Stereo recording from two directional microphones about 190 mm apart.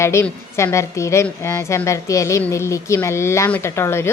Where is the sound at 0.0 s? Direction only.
15° left (ahead or behind).